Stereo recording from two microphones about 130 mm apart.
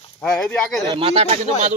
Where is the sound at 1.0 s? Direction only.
50° right (ahead or behind).